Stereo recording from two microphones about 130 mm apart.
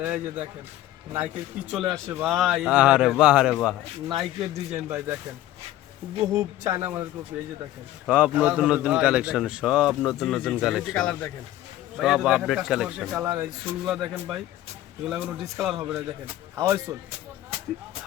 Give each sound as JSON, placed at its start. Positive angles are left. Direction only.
{"t": 0.0, "sound": "a man's voice", "side_deg": -15}
{"t": 2.3, "sound": "a man's voice", "side_deg": 0}
{"t": 4.4, "sound": "speech", "side_deg": -25}
{"t": 6.3, "sound": "a man's voice", "side_deg": -25}
{"t": 10.9, "sound": "speech", "side_deg": 10}
{"t": 11.9, "sound": "a man's voice", "side_deg": -5}
{"t": 16.6, "sound": "speech", "side_deg": -20}